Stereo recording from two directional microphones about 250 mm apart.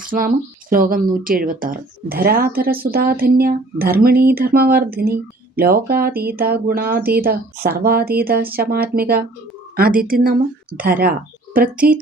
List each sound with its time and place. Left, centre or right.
0.0 s speech: right